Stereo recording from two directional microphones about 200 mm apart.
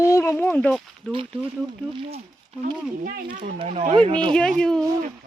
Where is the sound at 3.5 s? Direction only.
30° right (ahead or behind).